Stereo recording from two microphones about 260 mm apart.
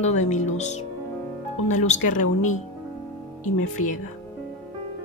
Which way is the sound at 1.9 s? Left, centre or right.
Left.